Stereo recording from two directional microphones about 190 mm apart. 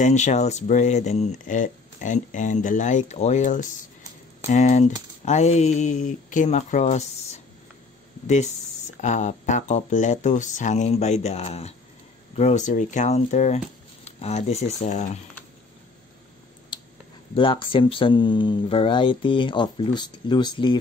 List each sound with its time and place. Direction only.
0.0 s speech: 40° left (ahead or behind)
8.3 s speech: 35° left (ahead or behind)
17.4 s speech: 25° left (ahead or behind)